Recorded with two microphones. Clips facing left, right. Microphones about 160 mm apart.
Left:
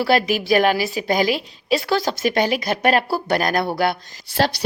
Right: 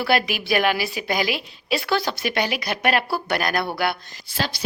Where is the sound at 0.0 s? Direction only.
40° left (ahead or behind).